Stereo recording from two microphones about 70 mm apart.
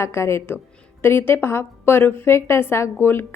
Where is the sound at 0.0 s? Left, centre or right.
Left.